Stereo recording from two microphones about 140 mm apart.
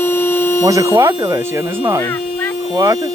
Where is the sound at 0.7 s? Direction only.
25° right (ahead or behind).